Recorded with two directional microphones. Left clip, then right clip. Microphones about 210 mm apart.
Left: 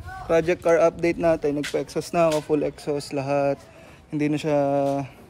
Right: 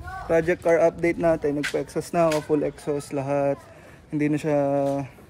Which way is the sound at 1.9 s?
Centre (ahead or behind).